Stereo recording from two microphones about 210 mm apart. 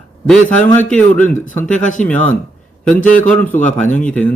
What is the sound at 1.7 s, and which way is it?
Speech, 35° left (ahead or behind).